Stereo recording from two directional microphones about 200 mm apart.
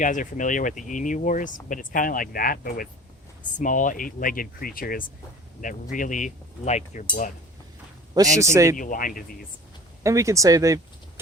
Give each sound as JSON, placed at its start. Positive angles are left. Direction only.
{"t": 0.0, "sound": "speech", "side_deg": 40}
{"t": 8.1, "sound": "speech", "side_deg": -15}
{"t": 8.7, "sound": "speech", "side_deg": 40}
{"t": 10.0, "sound": "speech", "side_deg": -15}